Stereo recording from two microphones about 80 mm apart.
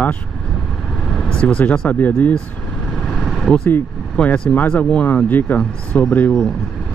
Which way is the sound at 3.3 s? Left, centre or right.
Centre.